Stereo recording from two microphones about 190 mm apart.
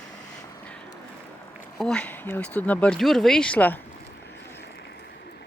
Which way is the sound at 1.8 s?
5° left (ahead or behind).